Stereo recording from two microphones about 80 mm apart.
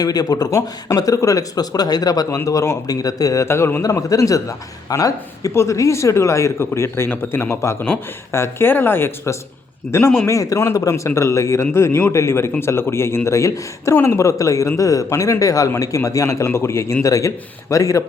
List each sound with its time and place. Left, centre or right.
0.0 s speech: left
3.4 s a man's voice: left
3.9 s a man's voice: left
13.9 s speech: left
14.2 s a man's voice: left